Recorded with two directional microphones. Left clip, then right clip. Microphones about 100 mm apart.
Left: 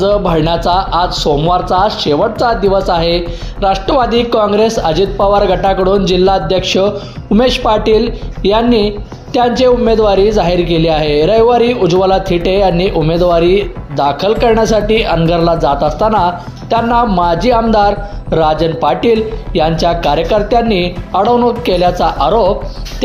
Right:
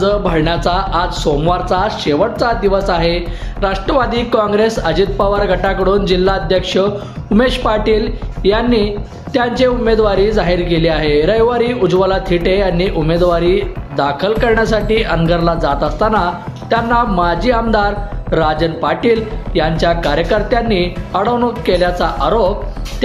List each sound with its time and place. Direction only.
0.0 s speech: 45° left (ahead or behind)